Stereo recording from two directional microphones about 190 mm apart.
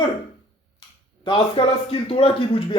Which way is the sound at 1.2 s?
25° left (ahead or behind).